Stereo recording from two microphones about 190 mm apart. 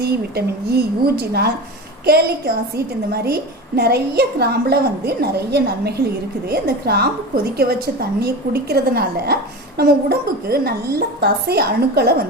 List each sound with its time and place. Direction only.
0.0 s a woman's voice: 55° right (ahead or behind)